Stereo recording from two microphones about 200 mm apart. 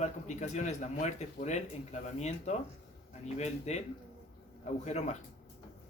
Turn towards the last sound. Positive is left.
turn(degrees=35)  # may be behind; listen again after turning